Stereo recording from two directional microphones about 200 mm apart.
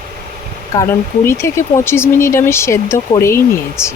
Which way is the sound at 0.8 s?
15° left (ahead or behind).